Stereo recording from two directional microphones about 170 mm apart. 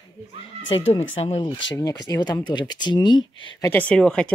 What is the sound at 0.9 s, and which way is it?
Speech, 40° left (ahead or behind).